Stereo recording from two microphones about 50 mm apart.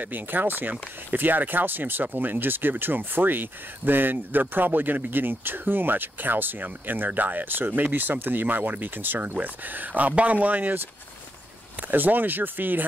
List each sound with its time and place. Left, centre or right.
0.0 s speech: right
11.9 s speech: right